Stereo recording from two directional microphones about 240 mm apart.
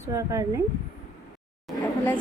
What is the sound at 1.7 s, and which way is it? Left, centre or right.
Speech, centre.